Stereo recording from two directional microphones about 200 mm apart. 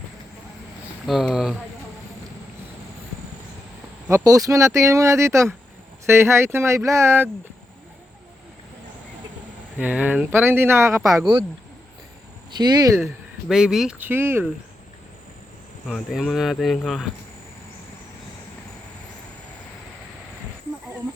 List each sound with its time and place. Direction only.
1.0 s speech: centre (ahead or behind)
4.1 s speech: 15° right (ahead or behind)
9.7 s speech: 5° right (ahead or behind)
12.5 s speech: 20° right (ahead or behind)
13.5 s speech: 5° right (ahead or behind)
15.9 s speech: centre (ahead or behind)